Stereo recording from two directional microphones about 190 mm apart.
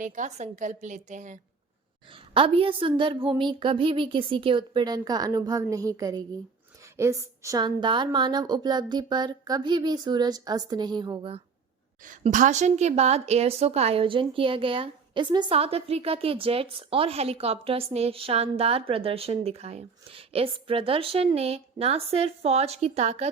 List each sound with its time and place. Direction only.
0.0 s a woman's voice: 40° right (ahead or behind)
2.3 s a woman's voice: 30° right (ahead or behind)
12.0 s a woman's voice: 45° right (ahead or behind)